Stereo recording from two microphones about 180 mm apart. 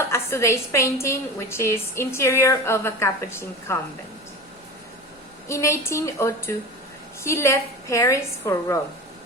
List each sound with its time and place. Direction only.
0.1 s a woman's voice: 15° left (ahead or behind)
5.5 s a woman's voice: 15° left (ahead or behind)